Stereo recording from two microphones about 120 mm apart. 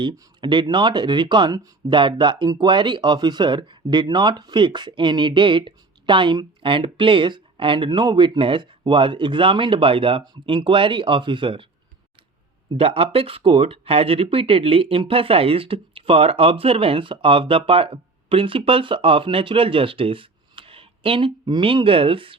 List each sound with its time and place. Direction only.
0.0 s speech: 40° right (ahead or behind)
12.7 s speech: 50° right (ahead or behind)